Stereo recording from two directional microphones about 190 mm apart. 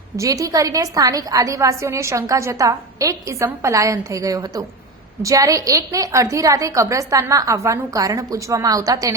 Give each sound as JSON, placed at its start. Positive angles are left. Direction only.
{"t": 0.2, "sound": "a woman's voice", "side_deg": -20}